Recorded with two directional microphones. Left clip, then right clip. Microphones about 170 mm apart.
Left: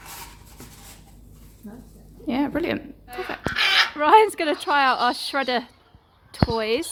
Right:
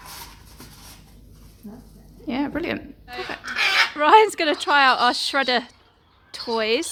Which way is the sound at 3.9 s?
5° right (ahead or behind).